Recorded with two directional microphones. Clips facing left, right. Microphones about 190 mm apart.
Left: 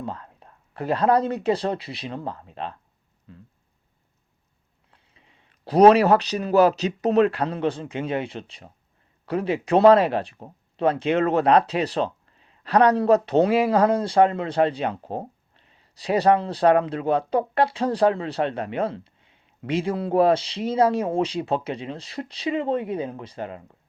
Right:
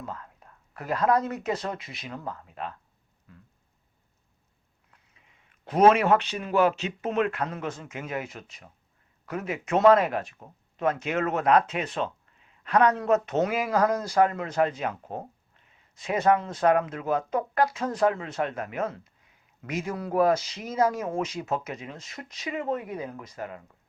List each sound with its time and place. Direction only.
0.0 s speech: 30° left (ahead or behind)
3.3 s a sound: 30° left (ahead or behind)
4.9 s a man's voice: 30° left (ahead or behind)